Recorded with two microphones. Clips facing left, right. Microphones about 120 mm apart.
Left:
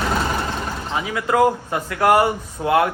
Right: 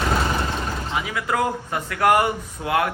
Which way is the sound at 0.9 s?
25° left (ahead or behind).